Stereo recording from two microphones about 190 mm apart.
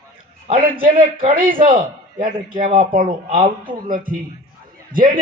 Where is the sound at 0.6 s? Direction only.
50° right (ahead or behind).